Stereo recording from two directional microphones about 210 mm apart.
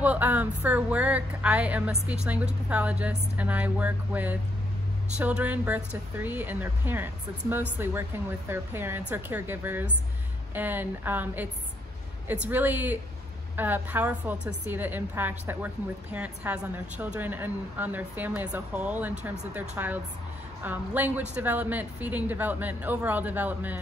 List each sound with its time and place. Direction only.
0.0 s a woman's voice: 10° right (ahead or behind)